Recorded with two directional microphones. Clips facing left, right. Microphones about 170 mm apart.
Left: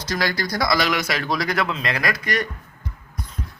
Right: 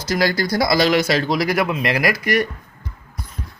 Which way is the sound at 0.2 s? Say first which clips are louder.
Right 5 dB; 30° right (ahead or behind).